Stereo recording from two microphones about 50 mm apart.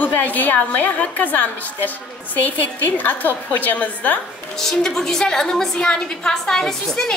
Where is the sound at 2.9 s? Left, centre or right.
Left.